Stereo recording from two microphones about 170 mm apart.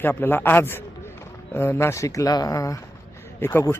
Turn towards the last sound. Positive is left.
turn(degrees=15)  # may be behind; listen again after turning